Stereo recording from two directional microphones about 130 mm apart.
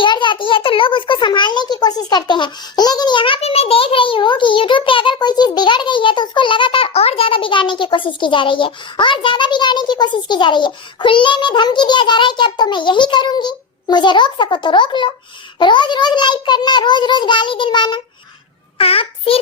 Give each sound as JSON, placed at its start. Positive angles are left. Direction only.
{"t": 0.0, "sound": "a child's voice", "side_deg": 35}
{"t": 18.8, "sound": "a child's voice", "side_deg": 45}